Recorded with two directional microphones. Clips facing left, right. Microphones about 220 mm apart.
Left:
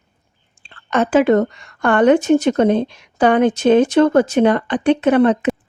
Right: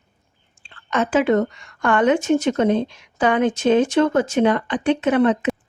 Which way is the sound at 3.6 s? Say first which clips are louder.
Left 4 dB; 60° left (ahead or behind).